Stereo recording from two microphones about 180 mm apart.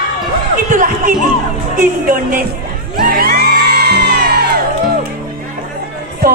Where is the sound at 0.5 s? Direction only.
45° right (ahead or behind).